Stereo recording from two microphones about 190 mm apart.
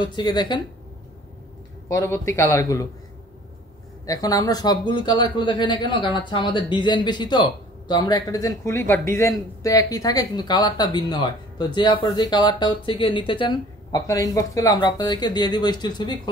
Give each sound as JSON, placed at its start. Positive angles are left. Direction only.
{"t": 0.0, "sound": "speech", "side_deg": 25}
{"t": 1.9, "sound": "a man's voice", "side_deg": 15}
{"t": 4.0, "sound": "speech", "side_deg": 20}